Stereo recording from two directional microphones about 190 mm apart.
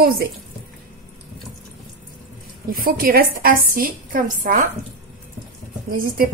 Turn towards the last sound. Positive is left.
turn(degrees=-50)  # may be behind; listen again after turning